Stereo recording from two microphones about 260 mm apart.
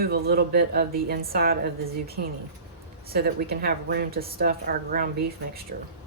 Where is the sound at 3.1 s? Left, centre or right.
Right.